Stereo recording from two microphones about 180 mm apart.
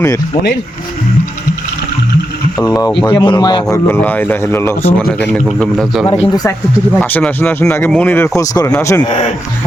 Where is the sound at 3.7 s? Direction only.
10° left (ahead or behind).